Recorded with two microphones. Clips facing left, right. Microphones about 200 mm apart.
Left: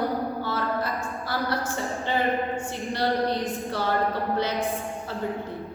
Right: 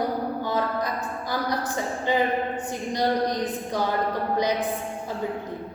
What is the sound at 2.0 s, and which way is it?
A woman's voice, 15° right (ahead or behind).